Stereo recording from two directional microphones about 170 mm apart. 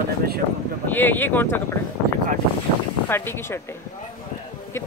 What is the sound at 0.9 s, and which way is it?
Speech, 10° left (ahead or behind).